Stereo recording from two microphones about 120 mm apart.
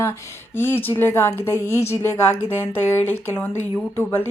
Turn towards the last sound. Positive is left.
turn(degrees=20)  # may be behind; listen again after turning